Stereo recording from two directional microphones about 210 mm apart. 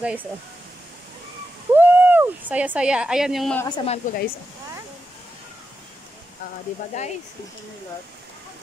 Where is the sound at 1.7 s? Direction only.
10° right (ahead or behind).